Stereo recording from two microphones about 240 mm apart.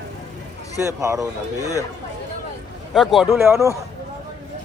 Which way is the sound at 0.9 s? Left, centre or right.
Centre.